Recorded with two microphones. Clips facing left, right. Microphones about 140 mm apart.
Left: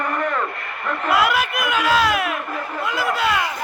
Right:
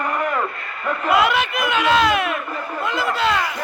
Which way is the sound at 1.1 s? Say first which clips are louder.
Right 1 dB; 5° left (ahead or behind).